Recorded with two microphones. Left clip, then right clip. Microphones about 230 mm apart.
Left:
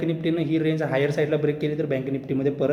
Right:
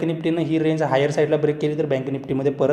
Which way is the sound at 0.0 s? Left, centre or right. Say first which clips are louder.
Right 3 dB; centre.